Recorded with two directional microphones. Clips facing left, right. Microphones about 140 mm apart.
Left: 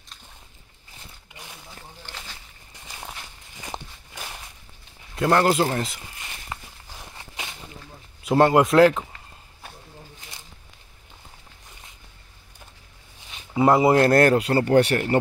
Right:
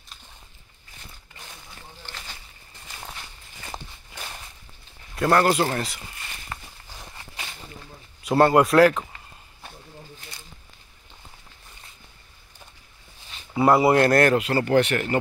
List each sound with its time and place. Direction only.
1.3 s a sound: 10° left (ahead or behind)
3.6 s walk: 10° left (ahead or behind)
5.1 s speech: 20° left (ahead or behind)
6.5 s walk: 10° left (ahead or behind)
8.2 s speech: 20° left (ahead or behind)
13.6 s speech: 20° left (ahead or behind)